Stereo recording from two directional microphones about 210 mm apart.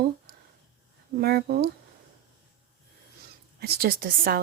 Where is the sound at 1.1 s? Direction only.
50° right (ahead or behind).